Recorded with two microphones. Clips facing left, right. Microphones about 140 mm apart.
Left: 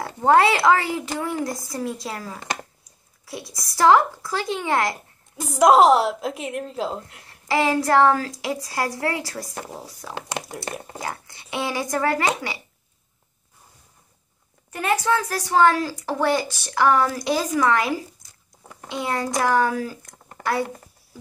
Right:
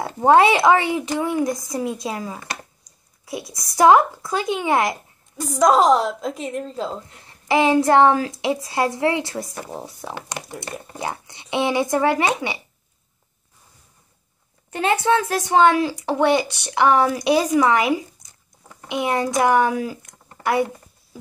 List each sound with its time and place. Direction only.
0.0 s a woman's voice: 25° right (ahead or behind)
3.7 s a woman's voice: 20° right (ahead or behind)
5.6 s a woman's voice: 5° left (ahead or behind)
7.2 s a woman's voice: 20° right (ahead or behind)
14.7 s a woman's voice: 25° right (ahead or behind)